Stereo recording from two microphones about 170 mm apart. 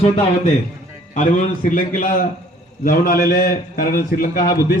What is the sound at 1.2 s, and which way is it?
A man's voice, 45° left (ahead or behind).